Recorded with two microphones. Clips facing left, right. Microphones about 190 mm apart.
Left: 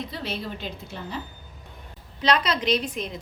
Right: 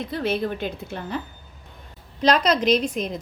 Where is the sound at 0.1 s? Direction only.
55° right (ahead or behind).